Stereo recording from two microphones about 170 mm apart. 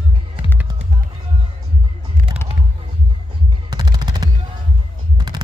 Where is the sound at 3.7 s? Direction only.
25° right (ahead or behind).